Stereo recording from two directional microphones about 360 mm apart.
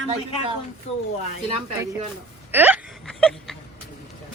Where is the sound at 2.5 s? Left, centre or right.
Centre.